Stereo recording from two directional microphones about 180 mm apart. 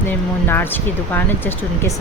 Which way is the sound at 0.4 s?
10° left (ahead or behind).